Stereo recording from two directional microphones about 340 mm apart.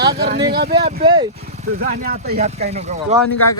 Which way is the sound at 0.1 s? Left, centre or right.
Right.